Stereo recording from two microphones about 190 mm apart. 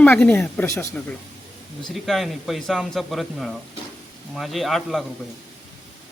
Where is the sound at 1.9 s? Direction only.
Centre (ahead or behind).